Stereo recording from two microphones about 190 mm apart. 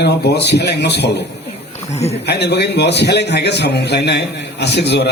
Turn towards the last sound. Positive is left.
turn(degrees=60)  # may be behind; listen again after turning